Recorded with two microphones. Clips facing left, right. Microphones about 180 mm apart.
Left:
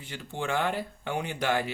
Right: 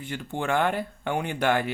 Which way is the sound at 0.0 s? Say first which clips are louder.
Right 4 dB; 55° right (ahead or behind).